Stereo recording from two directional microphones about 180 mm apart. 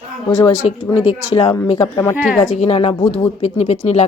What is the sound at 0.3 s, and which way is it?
Speech, 15° left (ahead or behind).